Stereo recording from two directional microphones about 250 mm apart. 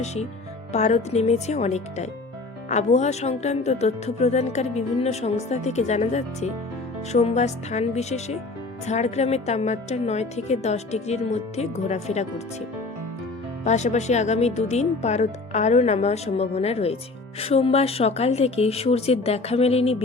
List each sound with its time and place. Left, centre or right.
0.0 s speech: left
13.7 s speech: left